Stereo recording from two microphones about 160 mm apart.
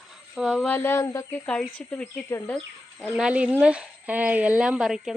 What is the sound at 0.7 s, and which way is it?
Speech, 15° left (ahead or behind).